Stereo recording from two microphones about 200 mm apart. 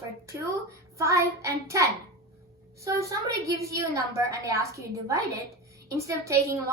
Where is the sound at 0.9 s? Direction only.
15° right (ahead or behind).